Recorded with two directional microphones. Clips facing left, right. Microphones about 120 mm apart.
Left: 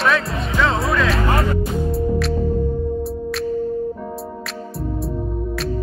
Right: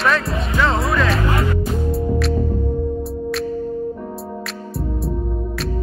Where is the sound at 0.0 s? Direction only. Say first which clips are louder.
Even; centre (ahead or behind).